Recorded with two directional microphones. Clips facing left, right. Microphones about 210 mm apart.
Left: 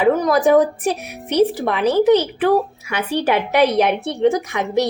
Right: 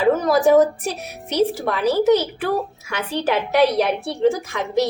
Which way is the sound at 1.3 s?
15° left (ahead or behind).